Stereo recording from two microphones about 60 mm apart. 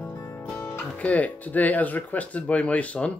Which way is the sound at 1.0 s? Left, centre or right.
Left.